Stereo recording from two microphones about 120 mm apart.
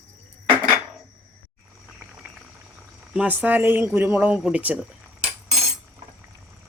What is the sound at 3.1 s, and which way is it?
Speech, 10° right (ahead or behind).